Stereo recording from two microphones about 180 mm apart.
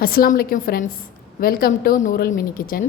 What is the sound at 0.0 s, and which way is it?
A woman's voice, 55° left (ahead or behind).